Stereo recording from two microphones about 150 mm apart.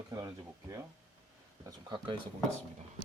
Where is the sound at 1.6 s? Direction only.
30° right (ahead or behind).